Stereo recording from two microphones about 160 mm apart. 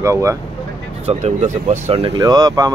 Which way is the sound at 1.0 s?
45° right (ahead or behind).